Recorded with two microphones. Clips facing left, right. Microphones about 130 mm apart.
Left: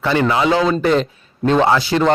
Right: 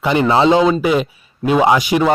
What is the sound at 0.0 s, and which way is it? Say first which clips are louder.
A man's voice: right 3 dB; 20° right (ahead or behind).